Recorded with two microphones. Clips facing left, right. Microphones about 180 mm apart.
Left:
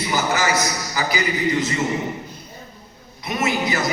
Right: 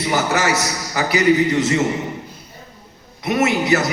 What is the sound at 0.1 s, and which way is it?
Speech, 70° right (ahead or behind).